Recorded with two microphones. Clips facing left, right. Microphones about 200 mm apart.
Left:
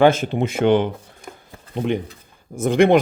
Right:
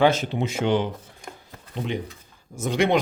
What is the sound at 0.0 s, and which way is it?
Speech, 50° left (ahead or behind).